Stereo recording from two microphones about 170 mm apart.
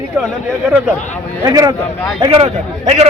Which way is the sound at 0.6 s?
5° right (ahead or behind).